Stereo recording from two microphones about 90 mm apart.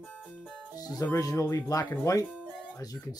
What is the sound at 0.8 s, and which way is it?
Music, 45° left (ahead or behind).